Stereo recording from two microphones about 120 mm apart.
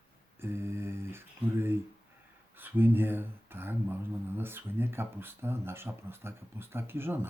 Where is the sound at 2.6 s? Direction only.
15° right (ahead or behind).